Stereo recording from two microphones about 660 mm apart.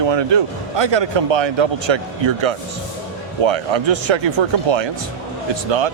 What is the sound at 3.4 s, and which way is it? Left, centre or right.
Speech, right.